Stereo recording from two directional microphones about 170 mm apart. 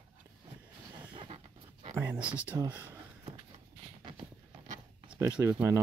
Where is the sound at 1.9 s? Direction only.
15° right (ahead or behind).